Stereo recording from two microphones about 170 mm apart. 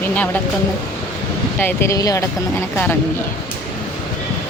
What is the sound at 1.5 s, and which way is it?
Speech, 15° left (ahead or behind).